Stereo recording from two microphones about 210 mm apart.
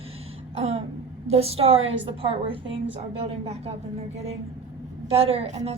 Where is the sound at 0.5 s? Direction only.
30° right (ahead or behind).